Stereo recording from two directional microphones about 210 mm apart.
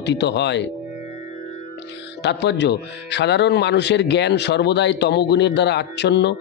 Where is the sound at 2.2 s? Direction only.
55° left (ahead or behind).